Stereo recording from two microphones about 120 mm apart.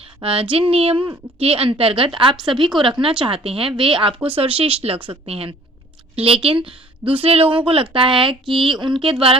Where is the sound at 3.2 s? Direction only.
50° right (ahead or behind).